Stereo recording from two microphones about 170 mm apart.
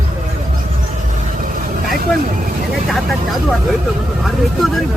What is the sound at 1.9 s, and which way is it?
Vehicle, 55° right (ahead or behind).